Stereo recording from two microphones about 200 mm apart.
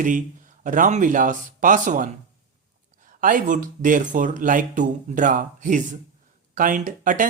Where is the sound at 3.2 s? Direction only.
40° right (ahead or behind).